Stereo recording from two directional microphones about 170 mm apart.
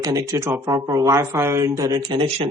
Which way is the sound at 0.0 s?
20° right (ahead or behind).